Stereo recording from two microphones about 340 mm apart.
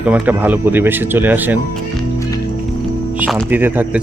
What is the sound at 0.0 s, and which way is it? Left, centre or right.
Speech, centre.